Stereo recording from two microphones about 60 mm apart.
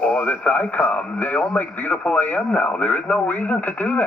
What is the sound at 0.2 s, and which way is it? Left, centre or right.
Speech, left.